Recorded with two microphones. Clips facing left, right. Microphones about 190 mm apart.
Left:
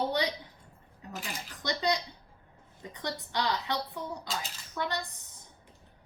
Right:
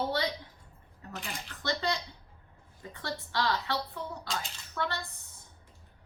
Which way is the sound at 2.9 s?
20° left (ahead or behind).